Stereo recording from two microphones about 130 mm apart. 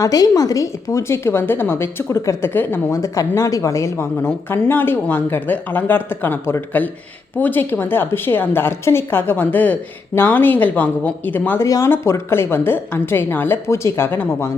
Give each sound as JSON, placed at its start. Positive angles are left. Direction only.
{"t": 0.0, "sound": "a woman's voice", "side_deg": 30}